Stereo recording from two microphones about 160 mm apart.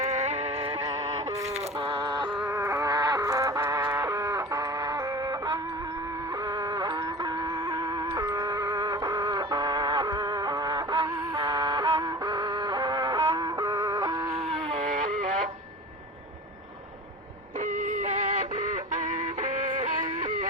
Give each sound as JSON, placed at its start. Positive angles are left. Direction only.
{"t": 0.0, "sound": "music", "side_deg": -45}
{"t": 1.9, "sound": "music", "side_deg": -30}
{"t": 2.4, "sound": "music", "side_deg": -15}
{"t": 7.7, "sound": "music", "side_deg": -25}
{"t": 14.5, "sound": "a sound", "side_deg": -45}
{"t": 17.7, "sound": "music", "side_deg": -50}
{"t": 19.4, "sound": "music", "side_deg": -50}